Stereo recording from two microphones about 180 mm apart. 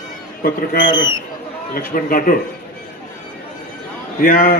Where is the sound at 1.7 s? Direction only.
50° left (ahead or behind).